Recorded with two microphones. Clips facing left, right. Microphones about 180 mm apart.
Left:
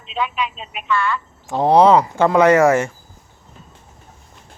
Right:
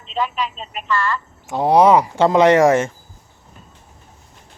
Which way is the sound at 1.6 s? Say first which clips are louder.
Left 1 dB; 15° right (ahead or behind).